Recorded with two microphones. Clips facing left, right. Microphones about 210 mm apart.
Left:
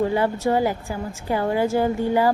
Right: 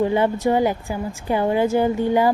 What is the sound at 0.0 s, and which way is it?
A woman's voice, 20° right (ahead or behind).